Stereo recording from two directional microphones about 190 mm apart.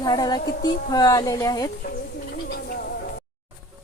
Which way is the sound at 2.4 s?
50° left (ahead or behind).